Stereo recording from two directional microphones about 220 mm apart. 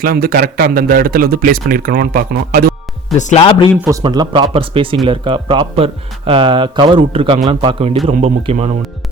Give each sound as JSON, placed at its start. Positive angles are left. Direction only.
{"t": 0.0, "sound": "speech", "side_deg": -40}
{"t": 3.2, "sound": "speech", "side_deg": 30}
{"t": 4.0, "sound": "speech", "side_deg": -20}